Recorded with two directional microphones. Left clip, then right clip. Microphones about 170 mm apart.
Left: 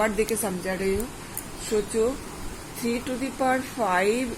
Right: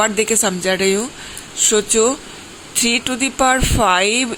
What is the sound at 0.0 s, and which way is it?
Speech, 65° right (ahead or behind).